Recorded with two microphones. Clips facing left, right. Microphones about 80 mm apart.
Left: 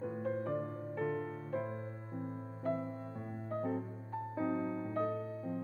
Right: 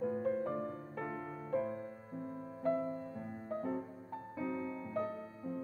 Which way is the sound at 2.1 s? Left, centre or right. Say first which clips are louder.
Left 1 dB; left.